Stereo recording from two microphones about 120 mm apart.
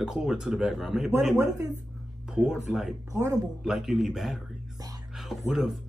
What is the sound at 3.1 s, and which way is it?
Speech, 25° right (ahead or behind).